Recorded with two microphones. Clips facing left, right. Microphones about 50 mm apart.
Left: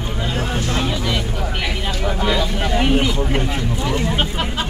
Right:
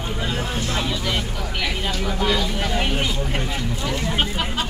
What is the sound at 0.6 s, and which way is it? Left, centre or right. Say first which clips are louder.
Speech: left 3 dB; centre.